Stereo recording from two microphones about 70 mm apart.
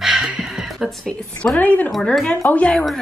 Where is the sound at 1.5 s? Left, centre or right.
Left.